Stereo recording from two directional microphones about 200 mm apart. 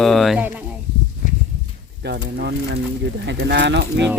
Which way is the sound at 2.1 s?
60° right (ahead or behind).